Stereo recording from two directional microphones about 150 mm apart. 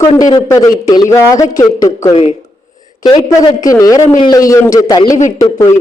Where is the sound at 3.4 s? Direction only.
25° left (ahead or behind).